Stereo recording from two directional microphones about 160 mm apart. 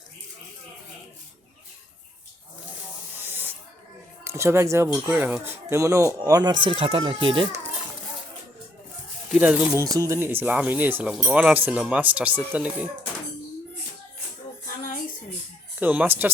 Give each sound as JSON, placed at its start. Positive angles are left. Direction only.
{"t": 3.2, "sound": "snake", "side_deg": -10}
{"t": 4.2, "sound": "speech", "side_deg": -15}
{"t": 9.3, "sound": "speech", "side_deg": -10}
{"t": 9.8, "sound": "speech", "side_deg": -20}
{"t": 15.8, "sound": "speech", "side_deg": -10}